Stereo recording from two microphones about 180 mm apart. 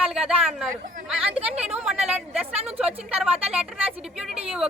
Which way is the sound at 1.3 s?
35° right (ahead or behind).